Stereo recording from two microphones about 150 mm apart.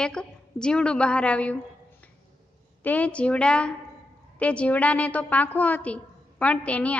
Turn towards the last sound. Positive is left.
turn(degrees=10)  # may be behind; listen again after turning